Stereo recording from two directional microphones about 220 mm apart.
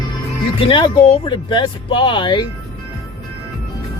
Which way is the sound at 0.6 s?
20° left (ahead or behind).